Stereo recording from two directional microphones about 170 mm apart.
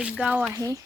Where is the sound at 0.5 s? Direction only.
20° right (ahead or behind).